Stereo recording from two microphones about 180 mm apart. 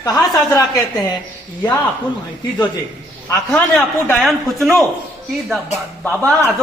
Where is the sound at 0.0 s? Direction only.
20° left (ahead or behind).